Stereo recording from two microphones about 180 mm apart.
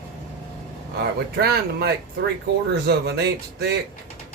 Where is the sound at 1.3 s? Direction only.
60° right (ahead or behind).